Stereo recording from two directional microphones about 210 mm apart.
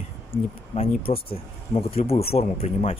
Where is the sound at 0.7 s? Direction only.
25° left (ahead or behind).